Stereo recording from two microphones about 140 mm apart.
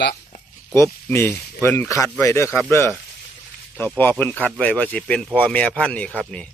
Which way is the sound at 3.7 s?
10° left (ahead or behind).